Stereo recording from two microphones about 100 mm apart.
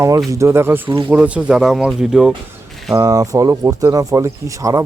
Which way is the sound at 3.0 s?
35° right (ahead or behind).